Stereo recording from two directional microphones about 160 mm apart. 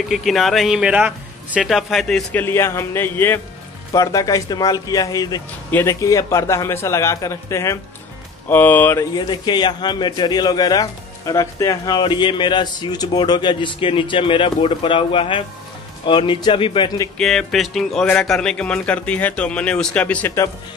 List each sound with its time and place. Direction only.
0.1 s a man's voice: centre (ahead or behind)
9.1 s a man's voice: 25° left (ahead or behind)
17.2 s a man's voice: 5° left (ahead or behind)